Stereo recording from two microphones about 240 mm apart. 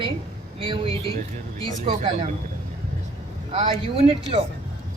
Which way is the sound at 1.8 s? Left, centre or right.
Right.